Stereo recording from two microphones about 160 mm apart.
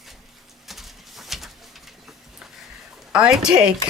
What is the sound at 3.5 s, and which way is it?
Speech, 5° right (ahead or behind).